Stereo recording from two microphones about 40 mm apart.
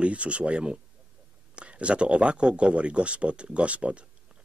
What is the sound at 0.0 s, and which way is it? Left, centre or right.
Speech, right.